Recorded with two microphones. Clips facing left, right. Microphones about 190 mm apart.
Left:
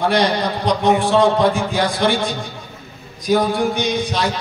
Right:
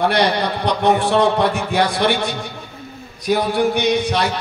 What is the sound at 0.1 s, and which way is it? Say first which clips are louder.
A man's voice: even; 65° right (ahead or behind).